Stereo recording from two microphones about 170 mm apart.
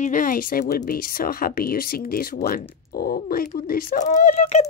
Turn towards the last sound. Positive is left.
turn(degrees=40)  # may be behind; listen again after turning